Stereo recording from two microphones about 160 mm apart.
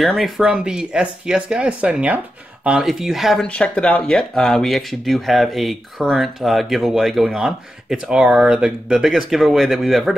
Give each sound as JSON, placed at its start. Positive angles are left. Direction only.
{"t": 0.0, "sound": "speech", "side_deg": 0}